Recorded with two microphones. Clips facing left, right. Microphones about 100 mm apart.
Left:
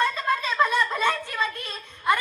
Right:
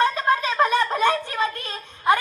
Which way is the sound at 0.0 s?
65° right (ahead or behind).